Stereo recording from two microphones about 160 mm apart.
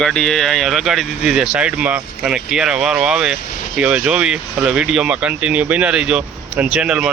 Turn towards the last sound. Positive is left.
turn(degrees=-5)  # may be behind; listen again after turning